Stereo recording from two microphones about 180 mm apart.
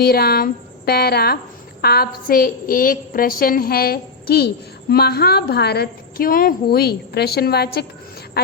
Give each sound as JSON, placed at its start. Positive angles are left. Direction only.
{"t": 0.0, "sound": "a woman's voice", "side_deg": 60}